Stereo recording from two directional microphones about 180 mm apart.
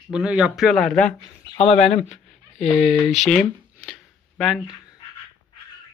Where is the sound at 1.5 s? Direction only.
35° left (ahead or behind).